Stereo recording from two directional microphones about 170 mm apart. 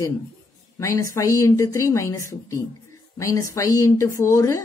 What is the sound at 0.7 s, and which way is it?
A woman's voice, 20° left (ahead or behind).